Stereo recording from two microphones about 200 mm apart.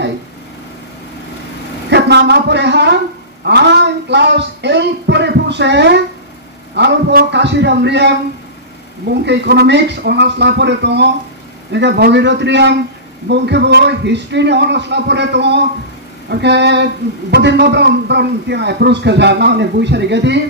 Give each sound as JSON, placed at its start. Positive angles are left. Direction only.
{"t": 1.9, "sound": "a man's voice", "side_deg": -60}